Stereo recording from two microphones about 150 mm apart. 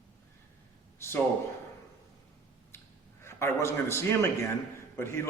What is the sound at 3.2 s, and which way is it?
A man's voice, 15° left (ahead or behind).